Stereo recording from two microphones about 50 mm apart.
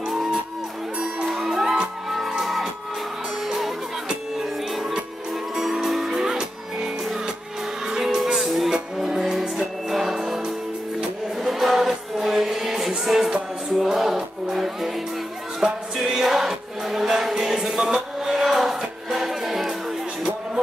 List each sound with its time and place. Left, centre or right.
0.9 s music: centre